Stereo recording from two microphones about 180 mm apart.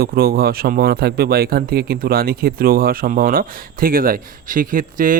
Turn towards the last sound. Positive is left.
turn(degrees=-50)  # may be behind; listen again after turning